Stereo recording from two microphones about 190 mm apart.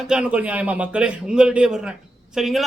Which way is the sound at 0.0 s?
5° right (ahead or behind).